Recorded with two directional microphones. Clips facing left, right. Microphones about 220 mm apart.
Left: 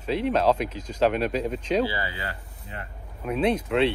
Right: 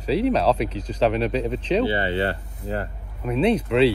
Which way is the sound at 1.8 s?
25° right (ahead or behind).